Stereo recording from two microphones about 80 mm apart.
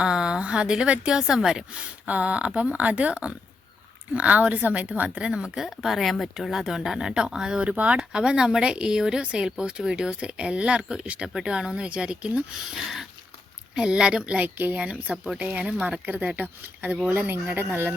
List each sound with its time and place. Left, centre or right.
0.0 s speech: centre; by 17.9 s right